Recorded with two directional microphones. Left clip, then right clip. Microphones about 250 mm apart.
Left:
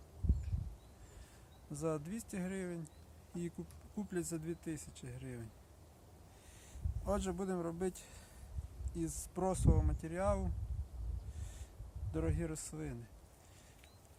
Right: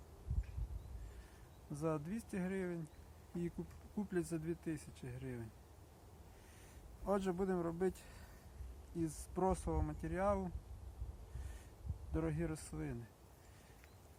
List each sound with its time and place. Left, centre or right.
1.7 s speech: centre
3.9 s speech: centre
7.0 s speech: centre
12.1 s speech: centre